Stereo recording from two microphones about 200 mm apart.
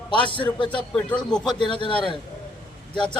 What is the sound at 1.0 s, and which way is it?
Speech, 5° left (ahead or behind).